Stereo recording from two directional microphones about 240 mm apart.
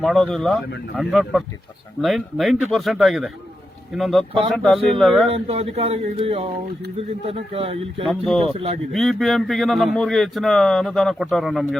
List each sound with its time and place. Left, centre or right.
0.0 s speech: centre
5.3 s a man's voice: right
8.0 s speech: centre
8.4 s a man's voice: right
8.9 s speech: centre